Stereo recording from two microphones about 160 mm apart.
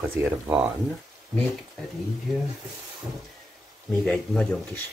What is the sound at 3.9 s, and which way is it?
Speech, 5° left (ahead or behind).